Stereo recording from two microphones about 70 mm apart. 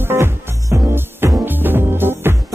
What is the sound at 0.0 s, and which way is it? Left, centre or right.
Music, right.